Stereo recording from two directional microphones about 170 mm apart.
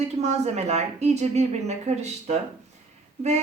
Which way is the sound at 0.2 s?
40° right (ahead or behind).